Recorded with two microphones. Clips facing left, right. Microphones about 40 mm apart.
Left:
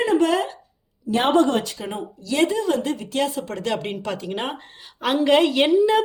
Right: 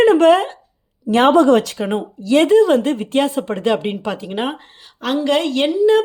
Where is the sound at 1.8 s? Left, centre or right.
Right.